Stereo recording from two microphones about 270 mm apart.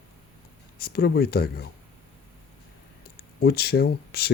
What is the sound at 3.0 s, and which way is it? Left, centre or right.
Speech, left.